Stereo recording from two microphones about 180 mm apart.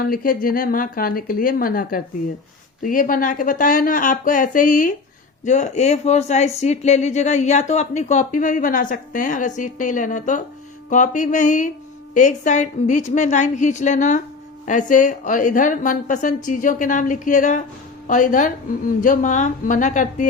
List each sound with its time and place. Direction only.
0.0 s speech: 55° left (ahead or behind)